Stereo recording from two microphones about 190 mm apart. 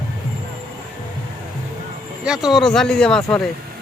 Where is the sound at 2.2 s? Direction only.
5° right (ahead or behind).